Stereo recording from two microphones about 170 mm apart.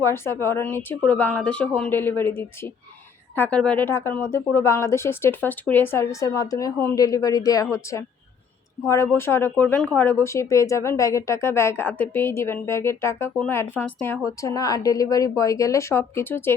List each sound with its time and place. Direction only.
0.0 s speech: 15° left (ahead or behind)
9.1 s speech: 15° left (ahead or behind)